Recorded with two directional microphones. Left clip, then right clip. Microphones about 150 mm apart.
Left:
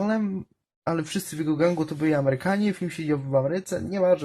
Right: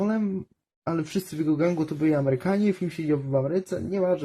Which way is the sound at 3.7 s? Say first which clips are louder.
Left 6 dB; 20° left (ahead or behind).